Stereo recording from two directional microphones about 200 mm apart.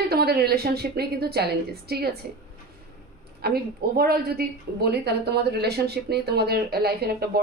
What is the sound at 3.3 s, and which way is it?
A woman's voice, 50° right (ahead or behind).